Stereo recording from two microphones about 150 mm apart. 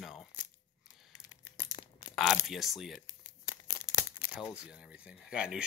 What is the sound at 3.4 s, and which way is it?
Crumpling, 20° left (ahead or behind).